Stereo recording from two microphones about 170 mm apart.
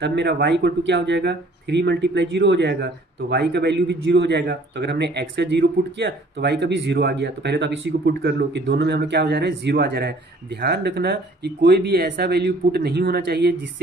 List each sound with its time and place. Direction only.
0.0 s a man's voice: 80° right